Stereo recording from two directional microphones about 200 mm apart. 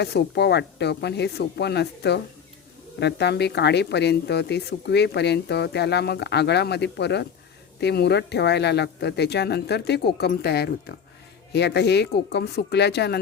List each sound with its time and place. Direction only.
0.0 s speech: 55° left (ahead or behind)